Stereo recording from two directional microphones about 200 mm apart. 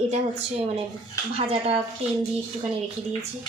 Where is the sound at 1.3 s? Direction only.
30° right (ahead or behind).